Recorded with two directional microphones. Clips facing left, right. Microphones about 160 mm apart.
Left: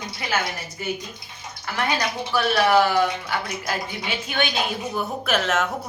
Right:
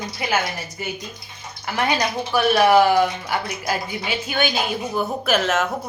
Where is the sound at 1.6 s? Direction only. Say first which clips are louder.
Right 3 dB; 15° right (ahead or behind); by 5.6 s centre (ahead or behind).